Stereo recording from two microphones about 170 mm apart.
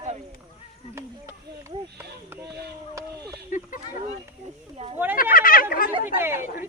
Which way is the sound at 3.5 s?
55° left (ahead or behind).